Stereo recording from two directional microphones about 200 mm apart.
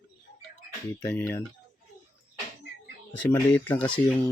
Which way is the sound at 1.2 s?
10° left (ahead or behind).